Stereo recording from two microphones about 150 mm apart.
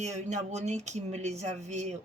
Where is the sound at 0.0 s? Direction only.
50° right (ahead or behind).